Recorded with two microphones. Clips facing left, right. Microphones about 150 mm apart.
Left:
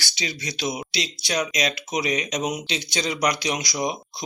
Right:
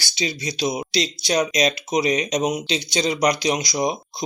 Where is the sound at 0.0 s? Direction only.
35° right (ahead or behind).